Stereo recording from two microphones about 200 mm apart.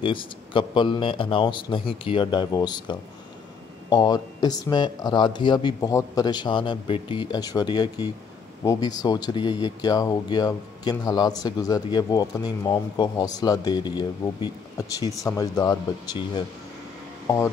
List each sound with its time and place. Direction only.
0.0 s speech: 25° left (ahead or behind)